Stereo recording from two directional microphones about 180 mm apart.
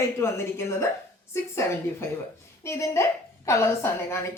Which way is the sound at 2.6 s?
15° left (ahead or behind).